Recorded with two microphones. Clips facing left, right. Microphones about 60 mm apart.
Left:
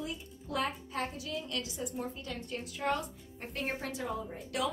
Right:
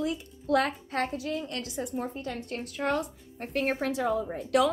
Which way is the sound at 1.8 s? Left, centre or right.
Right.